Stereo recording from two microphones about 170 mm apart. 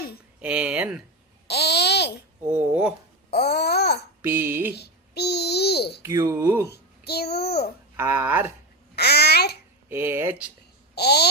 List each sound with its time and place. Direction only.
0.4 s speech: 5° right (ahead or behind)
1.5 s babbling: 75° left (ahead or behind)
2.5 s speech: 5° right (ahead or behind)
3.3 s babbling: 70° left (ahead or behind)
4.2 s a sound: 10° right (ahead or behind)
4.8 s babbling: 75° left (ahead or behind)
6.0 s speech: 15° right (ahead or behind)
6.7 s babbling: 70° left (ahead or behind)
7.9 s speech: 10° right (ahead or behind)
9.0 s babbling: 70° left (ahead or behind)
9.9 s speech: 15° right (ahead or behind)
10.9 s babbling: 70° left (ahead or behind)